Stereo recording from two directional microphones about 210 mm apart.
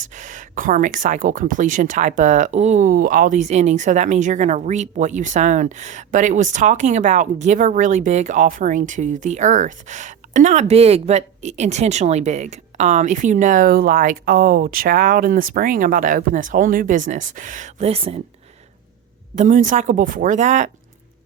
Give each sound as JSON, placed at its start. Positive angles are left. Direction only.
{"t": 0.1, "sound": "speech", "side_deg": -35}
{"t": 19.4, "sound": "speech", "side_deg": -35}